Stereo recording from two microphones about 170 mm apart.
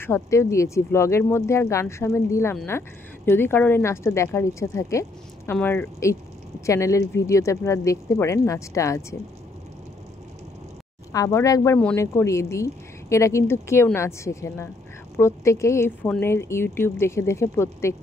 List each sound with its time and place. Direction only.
0.0 s speech: 15° left (ahead or behind)
11.1 s speech: 20° left (ahead or behind)